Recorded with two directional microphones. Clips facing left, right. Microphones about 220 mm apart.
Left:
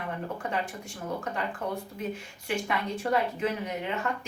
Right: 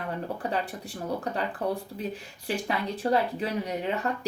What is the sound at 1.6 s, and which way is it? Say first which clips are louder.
Speech: right 3 dB; 35° right (ahead or behind).